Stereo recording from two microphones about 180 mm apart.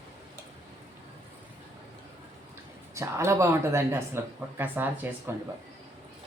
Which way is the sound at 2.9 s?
15° right (ahead or behind).